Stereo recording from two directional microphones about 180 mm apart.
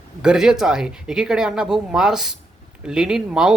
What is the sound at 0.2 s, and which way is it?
Speech, 5° right (ahead or behind).